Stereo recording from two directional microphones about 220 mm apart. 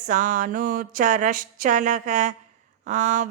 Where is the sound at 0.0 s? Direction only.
35° right (ahead or behind).